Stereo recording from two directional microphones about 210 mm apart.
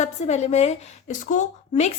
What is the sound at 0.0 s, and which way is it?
A woman's voice, 30° left (ahead or behind).